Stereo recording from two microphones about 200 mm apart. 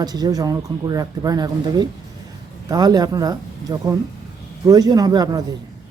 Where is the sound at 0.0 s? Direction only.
20° right (ahead or behind).